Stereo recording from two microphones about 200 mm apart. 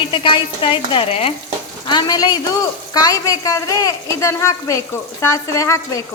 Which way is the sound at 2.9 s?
20° left (ahead or behind).